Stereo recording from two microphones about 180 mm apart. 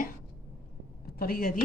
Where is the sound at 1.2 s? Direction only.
55° left (ahead or behind).